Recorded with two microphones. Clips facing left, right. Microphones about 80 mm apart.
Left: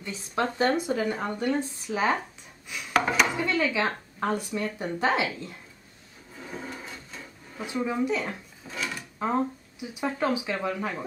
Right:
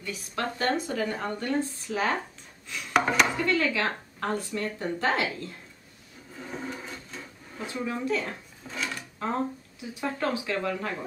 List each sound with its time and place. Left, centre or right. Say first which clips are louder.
0.0 s speech: left 3 dB; left
2.9 s speech: even; centre
3.3 s speech: even; centre
6.4 s a sound: right 1 dB; centre
7.6 s speech: left 3 dB; centre
8.6 s drawer open or close: even; centre
9.2 s speech: left 3 dB; centre